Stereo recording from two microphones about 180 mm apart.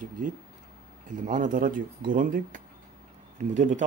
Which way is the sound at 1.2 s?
50° right (ahead or behind).